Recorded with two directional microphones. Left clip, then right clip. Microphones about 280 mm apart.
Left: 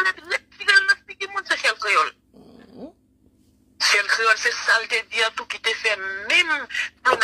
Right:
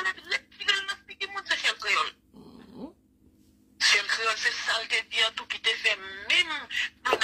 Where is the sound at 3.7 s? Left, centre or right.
Left.